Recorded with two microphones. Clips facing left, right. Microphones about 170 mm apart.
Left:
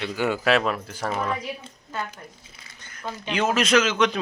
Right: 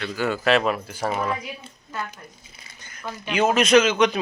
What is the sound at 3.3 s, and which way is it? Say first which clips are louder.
Speech: right 4 dB; 15° right (ahead or behind).